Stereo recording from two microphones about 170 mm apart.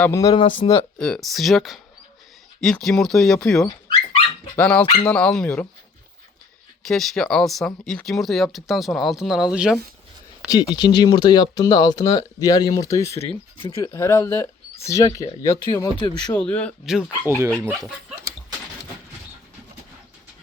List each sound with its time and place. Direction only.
0.0 s speech: 20° left (ahead or behind)
0.9 s speech: 5° left (ahead or behind)
6.8 s speech: centre (ahead or behind)
10.5 s speech: 25° left (ahead or behind)
13.6 s speech: 30° left (ahead or behind)
13.9 s speech: 15° left (ahead or behind)
16.3 s speech: 5° left (ahead or behind)
16.8 s speech: 5° right (ahead or behind)
17.2 s speech: 15° right (ahead or behind)